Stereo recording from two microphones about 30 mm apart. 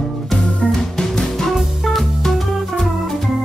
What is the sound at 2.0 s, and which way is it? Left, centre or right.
Music, centre.